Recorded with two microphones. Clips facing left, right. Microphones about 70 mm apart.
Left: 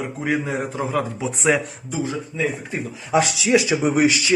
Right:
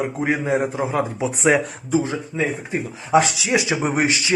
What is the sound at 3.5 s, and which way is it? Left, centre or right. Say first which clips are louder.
Speech: left 3 dB; right.